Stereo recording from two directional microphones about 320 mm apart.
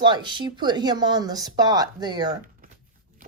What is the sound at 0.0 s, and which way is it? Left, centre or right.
Speech, centre.